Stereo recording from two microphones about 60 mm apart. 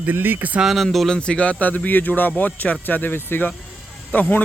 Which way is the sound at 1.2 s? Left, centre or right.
Centre.